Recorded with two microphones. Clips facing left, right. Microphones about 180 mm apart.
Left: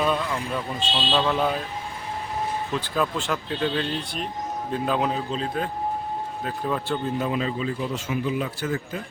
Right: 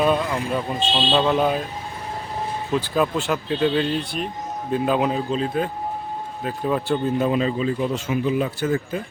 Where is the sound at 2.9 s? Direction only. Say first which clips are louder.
Right 3 dB; 10° right (ahead or behind).